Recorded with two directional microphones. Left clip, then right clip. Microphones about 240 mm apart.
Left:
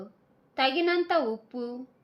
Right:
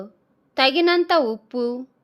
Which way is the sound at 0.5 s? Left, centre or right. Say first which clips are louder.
Right 8 dB; right.